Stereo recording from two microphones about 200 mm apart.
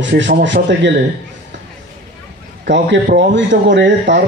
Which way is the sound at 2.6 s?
60° right (ahead or behind).